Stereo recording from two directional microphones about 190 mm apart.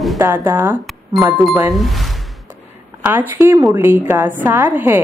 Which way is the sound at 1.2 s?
10° right (ahead or behind).